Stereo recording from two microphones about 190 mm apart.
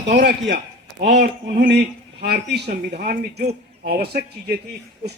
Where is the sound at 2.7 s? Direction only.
45° right (ahead or behind).